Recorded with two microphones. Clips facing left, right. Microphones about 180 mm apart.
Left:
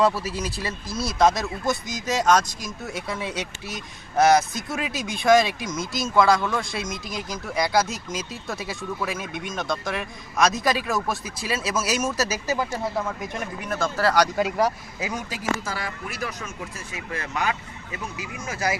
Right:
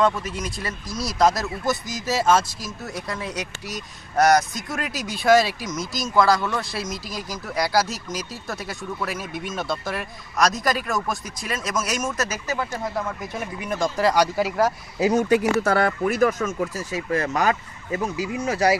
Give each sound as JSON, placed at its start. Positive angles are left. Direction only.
{"t": 0.2, "sound": "speech", "side_deg": 30}
{"t": 0.9, "sound": "speech", "side_deg": 0}
{"t": 3.3, "sound": "speech", "side_deg": 25}
{"t": 4.2, "sound": "speech", "side_deg": 0}
{"t": 6.9, "sound": "speech", "side_deg": 20}
{"t": 7.2, "sound": "speech", "side_deg": 0}
{"t": 15.0, "sound": "speech", "side_deg": -40}
{"t": 15.2, "sound": "speech", "side_deg": -60}